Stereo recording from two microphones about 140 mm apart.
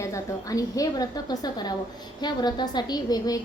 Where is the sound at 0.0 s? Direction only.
25° left (ahead or behind).